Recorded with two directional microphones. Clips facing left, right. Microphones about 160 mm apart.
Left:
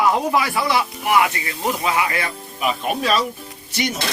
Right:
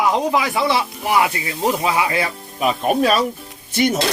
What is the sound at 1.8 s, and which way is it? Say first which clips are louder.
Speech: right 2 dB; 30° right (ahead or behind).